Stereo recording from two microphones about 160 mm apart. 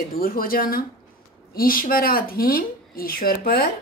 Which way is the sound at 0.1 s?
65° left (ahead or behind).